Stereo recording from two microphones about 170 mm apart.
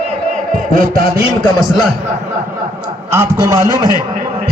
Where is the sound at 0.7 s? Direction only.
55° right (ahead or behind).